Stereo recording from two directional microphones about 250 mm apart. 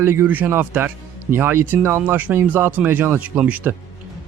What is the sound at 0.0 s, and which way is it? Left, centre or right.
A man's voice, centre.